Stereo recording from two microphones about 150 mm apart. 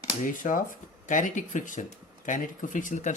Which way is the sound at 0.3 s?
60° left (ahead or behind).